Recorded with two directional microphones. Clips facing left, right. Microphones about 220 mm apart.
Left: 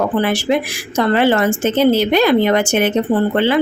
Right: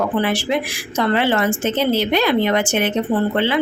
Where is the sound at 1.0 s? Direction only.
45° left (ahead or behind).